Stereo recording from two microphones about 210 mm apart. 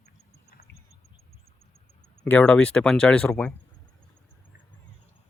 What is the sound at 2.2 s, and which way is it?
Speech, 5° left (ahead or behind).